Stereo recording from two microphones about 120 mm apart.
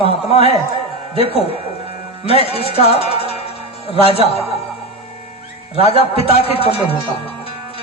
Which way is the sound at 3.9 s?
55° left (ahead or behind).